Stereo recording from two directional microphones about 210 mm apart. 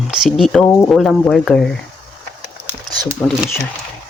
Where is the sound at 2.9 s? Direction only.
20° right (ahead or behind).